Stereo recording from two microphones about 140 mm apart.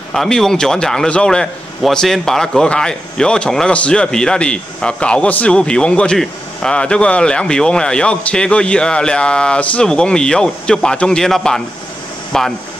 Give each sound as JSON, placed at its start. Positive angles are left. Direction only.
{"t": 0.1, "sound": "a man's voice", "side_deg": 5}